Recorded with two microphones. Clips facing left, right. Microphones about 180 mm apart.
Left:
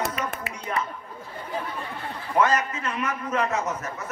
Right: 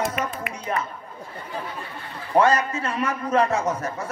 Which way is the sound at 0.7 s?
35° right (ahead or behind).